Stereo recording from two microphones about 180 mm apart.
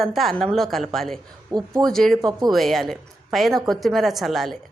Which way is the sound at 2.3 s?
20° right (ahead or behind).